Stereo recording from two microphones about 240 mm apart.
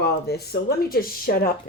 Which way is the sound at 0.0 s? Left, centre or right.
Left.